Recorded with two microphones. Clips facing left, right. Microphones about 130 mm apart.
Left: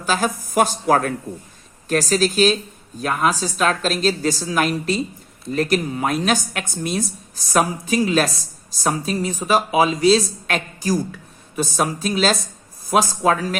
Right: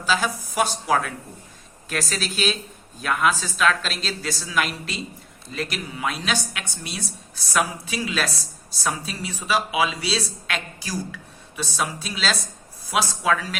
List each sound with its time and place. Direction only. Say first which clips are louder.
0.0 s speech: left 3 dB; 50° left (ahead or behind)